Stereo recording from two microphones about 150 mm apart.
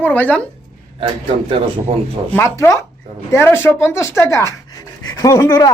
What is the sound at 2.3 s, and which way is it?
Speech, 20° left (ahead or behind).